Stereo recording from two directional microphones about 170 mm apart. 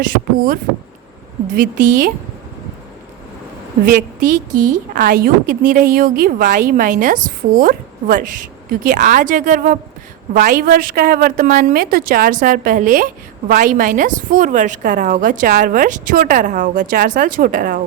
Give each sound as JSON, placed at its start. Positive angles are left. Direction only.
{"t": 0.0, "sound": "a woman's voice", "side_deg": -55}
{"t": 3.8, "sound": "a woman's voice", "side_deg": -55}